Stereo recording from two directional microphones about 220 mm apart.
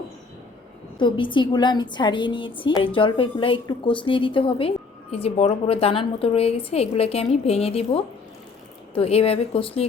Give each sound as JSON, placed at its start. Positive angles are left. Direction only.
{"t": 0.9, "sound": "a woman's voice", "side_deg": 20}